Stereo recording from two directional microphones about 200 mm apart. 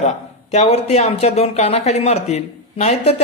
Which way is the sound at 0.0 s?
35° left (ahead or behind).